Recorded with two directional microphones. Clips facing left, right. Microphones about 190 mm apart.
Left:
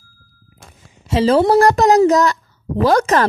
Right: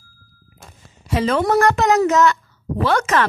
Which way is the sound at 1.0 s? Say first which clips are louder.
Left 5 dB; 30° left (ahead or behind).